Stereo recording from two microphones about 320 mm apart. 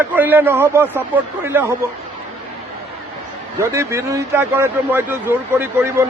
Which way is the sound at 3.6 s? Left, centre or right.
Centre.